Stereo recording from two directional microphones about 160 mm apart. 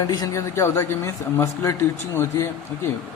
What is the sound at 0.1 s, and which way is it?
A man's voice, 20° left (ahead or behind).